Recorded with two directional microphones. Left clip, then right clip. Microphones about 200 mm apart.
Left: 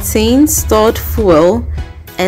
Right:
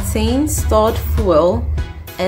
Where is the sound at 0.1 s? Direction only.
45° left (ahead or behind).